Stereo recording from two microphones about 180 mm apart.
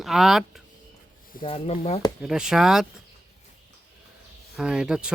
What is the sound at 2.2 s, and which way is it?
Speech, 5° right (ahead or behind).